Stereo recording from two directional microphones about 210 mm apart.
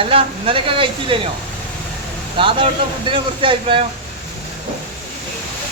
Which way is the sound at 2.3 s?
25° right (ahead or behind).